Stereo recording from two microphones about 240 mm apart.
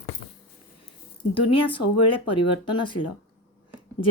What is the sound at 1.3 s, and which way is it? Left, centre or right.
Speech, left.